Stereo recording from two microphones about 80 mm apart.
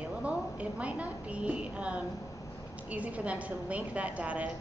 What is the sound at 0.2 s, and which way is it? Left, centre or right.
A woman's voice, centre.